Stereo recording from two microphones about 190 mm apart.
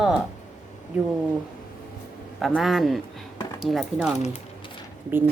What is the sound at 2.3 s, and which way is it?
A woman's voice, centre (ahead or behind).